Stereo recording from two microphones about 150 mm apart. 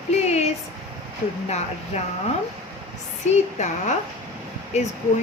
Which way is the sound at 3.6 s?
50° left (ahead or behind).